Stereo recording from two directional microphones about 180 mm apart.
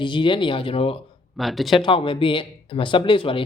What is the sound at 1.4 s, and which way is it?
Speech, centre (ahead or behind).